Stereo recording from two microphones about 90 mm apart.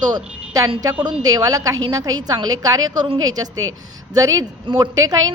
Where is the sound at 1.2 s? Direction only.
45° right (ahead or behind).